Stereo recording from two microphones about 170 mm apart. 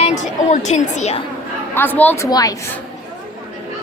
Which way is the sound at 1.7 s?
10° left (ahead or behind).